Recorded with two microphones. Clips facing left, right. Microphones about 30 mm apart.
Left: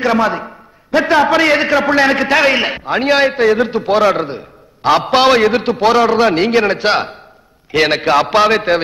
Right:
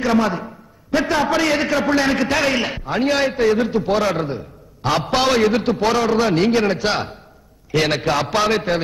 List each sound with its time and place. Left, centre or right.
0.0 s a man's voice: left